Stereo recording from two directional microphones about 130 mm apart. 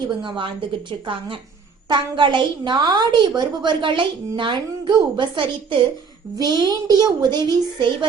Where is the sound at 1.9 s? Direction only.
35° right (ahead or behind).